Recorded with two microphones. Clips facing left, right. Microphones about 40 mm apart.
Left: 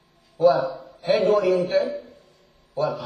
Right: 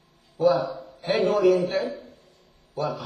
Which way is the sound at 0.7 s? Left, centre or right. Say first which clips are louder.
Left 3 dB; left.